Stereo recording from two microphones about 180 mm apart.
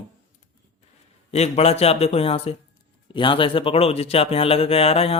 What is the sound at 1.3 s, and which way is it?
Speech, 35° left (ahead or behind).